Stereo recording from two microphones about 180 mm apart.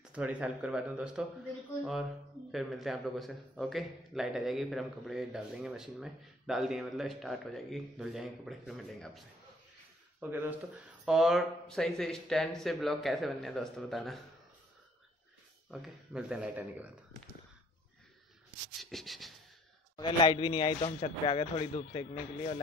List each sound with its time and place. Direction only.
0.0 s speech: 5° right (ahead or behind)
2.5 s a man's voice: centre (ahead or behind)
10.2 s speech: 15° right (ahead or behind)
11.1 s a man's voice: centre (ahead or behind)
15.7 s a man's voice: 5° right (ahead or behind)
18.8 s a man's voice: centre (ahead or behind)
20.0 s a man's voice: 25° left (ahead or behind)